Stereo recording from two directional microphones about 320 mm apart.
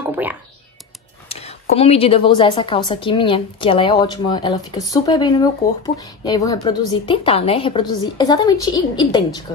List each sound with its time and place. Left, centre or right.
0.0 s music: centre
1.3 s speech: centre